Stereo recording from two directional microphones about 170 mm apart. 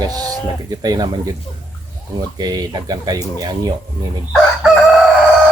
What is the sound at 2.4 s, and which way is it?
Speech, 25° right (ahead or behind).